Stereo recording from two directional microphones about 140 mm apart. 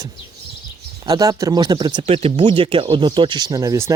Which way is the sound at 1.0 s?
25° right (ahead or behind).